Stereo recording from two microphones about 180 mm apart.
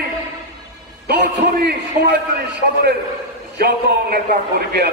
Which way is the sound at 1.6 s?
65° right (ahead or behind).